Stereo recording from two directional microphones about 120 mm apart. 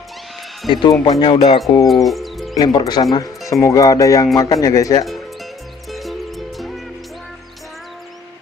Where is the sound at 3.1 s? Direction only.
30° left (ahead or behind).